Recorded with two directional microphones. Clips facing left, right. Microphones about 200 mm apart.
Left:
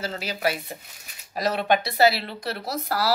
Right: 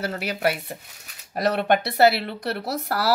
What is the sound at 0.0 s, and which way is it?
Speech, 60° right (ahead or behind).